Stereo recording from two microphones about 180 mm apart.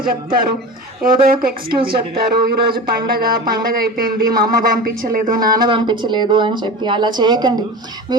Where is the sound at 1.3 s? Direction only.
55° right (ahead or behind).